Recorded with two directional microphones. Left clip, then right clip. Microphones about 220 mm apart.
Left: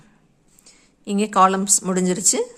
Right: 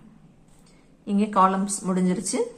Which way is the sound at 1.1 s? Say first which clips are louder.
Left 4 dB; 40° left (ahead or behind).